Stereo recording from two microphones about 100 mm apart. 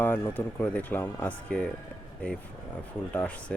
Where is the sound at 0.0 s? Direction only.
20° left (ahead or behind).